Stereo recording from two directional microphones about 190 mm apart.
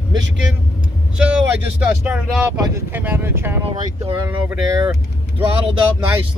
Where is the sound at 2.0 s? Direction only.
5° right (ahead or behind).